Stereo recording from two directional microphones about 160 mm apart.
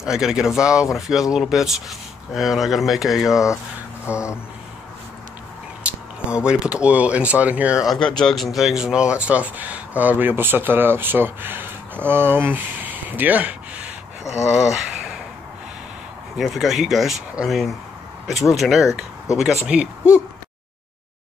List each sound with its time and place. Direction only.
0.0 s speech: 5° right (ahead or behind)
4.1 s speech: 15° left (ahead or behind)
5.9 s speech: 5° right (ahead or behind)
14.4 s speech: 20° left (ahead or behind)
16.3 s speech: centre (ahead or behind)